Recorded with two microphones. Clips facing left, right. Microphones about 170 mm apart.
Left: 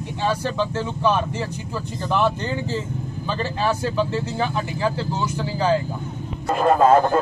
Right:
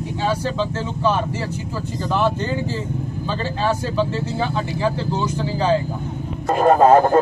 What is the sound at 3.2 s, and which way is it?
Speech, 15° left (ahead or behind).